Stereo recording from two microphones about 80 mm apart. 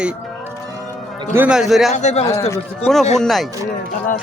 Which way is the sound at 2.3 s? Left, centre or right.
Left.